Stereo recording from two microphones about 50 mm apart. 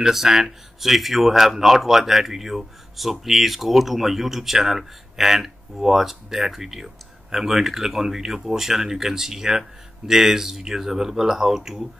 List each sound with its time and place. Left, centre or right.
0.0 s speech: centre